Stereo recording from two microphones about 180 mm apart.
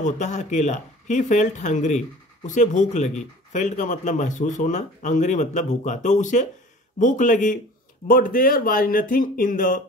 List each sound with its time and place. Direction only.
0.0 s speech: 40° left (ahead or behind)